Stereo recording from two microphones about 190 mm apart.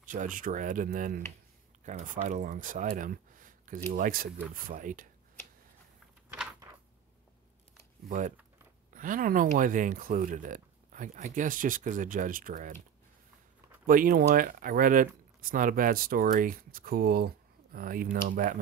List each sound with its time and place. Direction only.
0.0 s speech: 45° right (ahead or behind)
8.9 s speech: 45° right (ahead or behind)
13.8 s speech: 45° right (ahead or behind)